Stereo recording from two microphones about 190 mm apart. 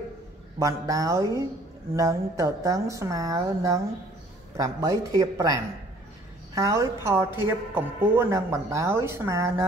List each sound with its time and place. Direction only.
0.6 s speech: 15° right (ahead or behind)
6.5 s speech: 15° right (ahead or behind)